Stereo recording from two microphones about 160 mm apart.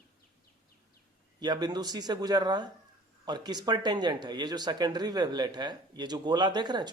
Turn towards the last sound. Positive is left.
turn(degrees=-25)  # may be behind; listen again after turning